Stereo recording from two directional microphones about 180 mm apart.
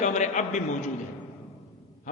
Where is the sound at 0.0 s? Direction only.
40° left (ahead or behind).